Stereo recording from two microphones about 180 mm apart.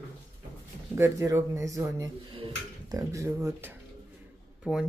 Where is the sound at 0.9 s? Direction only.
15° right (ahead or behind).